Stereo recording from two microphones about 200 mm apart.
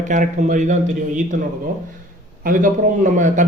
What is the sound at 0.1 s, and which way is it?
A man's voice, 40° right (ahead or behind).